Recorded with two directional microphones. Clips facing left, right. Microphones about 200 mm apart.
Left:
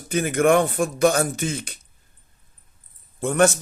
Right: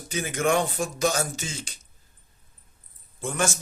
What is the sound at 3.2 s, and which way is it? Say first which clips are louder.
Speech: left 9 dB; 60° left (ahead or behind).